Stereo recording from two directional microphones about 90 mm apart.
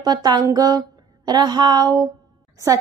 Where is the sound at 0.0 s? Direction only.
50° right (ahead or behind).